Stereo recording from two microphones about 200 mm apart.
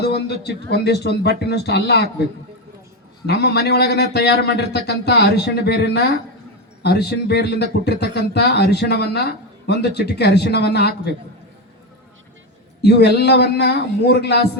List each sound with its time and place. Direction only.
0.0 s a man's voice: 55° left (ahead or behind)
3.2 s a man's voice: 55° left (ahead or behind)
12.8 s a man's voice: 55° left (ahead or behind)